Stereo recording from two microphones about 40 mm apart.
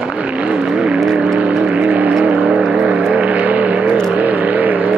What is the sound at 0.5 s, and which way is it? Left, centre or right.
Vehicle, centre.